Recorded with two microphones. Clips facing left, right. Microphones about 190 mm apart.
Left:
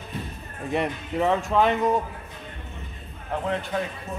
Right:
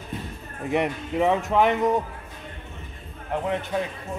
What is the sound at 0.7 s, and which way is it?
Speech, 15° right (ahead or behind).